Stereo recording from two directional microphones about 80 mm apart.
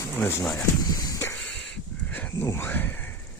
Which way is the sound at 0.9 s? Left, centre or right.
Left.